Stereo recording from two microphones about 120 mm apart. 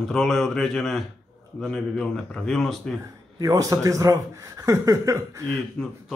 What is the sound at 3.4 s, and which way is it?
Speech, 30° right (ahead or behind).